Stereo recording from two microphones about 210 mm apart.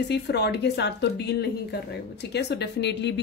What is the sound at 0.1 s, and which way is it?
A woman's voice, 55° left (ahead or behind).